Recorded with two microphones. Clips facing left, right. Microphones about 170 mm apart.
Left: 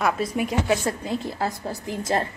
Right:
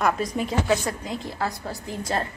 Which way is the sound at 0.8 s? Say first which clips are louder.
Left 3 dB; 25° left (ahead or behind).